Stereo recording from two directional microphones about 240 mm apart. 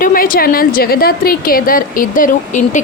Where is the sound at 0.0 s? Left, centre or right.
Left.